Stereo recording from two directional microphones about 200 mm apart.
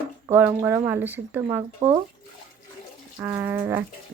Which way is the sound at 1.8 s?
35° right (ahead or behind).